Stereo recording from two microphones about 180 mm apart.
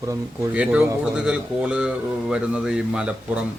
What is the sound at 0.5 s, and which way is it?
Speech, 5° right (ahead or behind).